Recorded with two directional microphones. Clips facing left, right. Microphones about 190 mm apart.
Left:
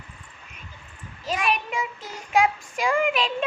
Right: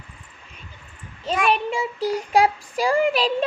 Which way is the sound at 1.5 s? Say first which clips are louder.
Right 6 dB; 30° right (ahead or behind).